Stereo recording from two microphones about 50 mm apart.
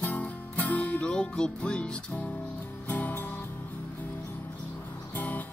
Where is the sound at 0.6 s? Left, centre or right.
Left.